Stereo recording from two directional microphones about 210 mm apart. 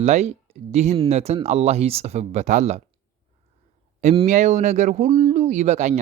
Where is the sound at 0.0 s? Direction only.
30° right (ahead or behind).